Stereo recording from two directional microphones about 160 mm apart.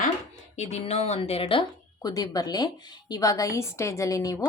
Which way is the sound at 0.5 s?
45° left (ahead or behind).